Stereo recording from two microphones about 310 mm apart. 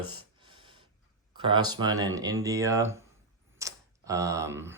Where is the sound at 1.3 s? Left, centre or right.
Centre.